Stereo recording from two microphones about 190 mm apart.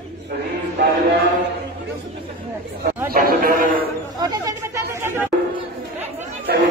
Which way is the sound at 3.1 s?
50° right (ahead or behind).